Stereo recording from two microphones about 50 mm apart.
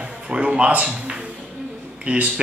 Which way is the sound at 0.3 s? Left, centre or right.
Right.